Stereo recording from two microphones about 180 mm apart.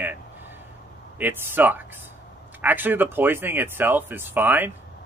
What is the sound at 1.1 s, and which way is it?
Speech, 10° right (ahead or behind).